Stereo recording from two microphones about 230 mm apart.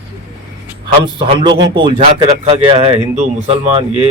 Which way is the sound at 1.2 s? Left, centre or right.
Right.